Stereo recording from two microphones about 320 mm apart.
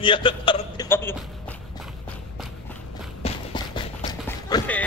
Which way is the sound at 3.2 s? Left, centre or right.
Centre.